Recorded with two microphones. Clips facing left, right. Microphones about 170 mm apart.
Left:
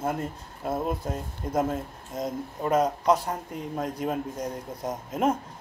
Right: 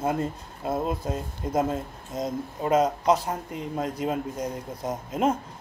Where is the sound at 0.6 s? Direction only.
10° right (ahead or behind).